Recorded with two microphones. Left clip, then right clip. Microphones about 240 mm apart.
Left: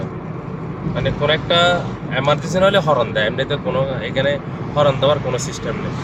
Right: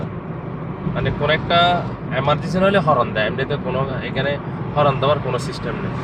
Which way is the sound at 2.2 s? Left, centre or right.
Centre.